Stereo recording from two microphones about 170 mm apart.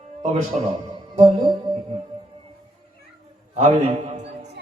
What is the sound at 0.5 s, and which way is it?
Speech, 40° right (ahead or behind).